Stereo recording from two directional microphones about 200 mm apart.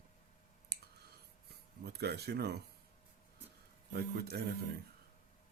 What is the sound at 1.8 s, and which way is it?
Speech, 55° right (ahead or behind).